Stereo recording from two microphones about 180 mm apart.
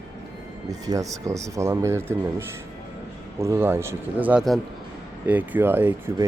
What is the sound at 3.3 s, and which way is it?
A man's voice, 15° right (ahead or behind).